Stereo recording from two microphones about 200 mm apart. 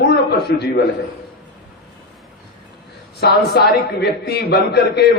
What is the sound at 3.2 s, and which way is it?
A man's voice, 55° left (ahead or behind).